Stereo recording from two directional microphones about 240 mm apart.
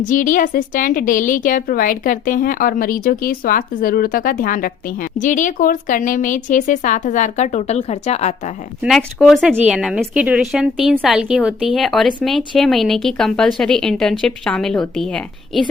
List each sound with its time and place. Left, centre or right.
0.0 s a woman's voice: left
8.8 s speech: centre